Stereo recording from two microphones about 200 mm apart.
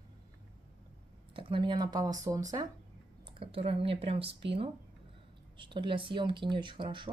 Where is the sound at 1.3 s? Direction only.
25° right (ahead or behind).